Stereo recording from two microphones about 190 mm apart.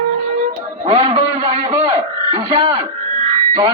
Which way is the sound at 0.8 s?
30° right (ahead or behind).